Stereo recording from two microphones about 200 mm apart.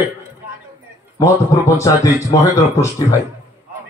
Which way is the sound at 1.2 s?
15° left (ahead or behind).